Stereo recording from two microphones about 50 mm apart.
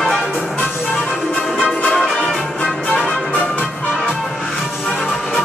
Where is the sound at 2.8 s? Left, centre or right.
Left.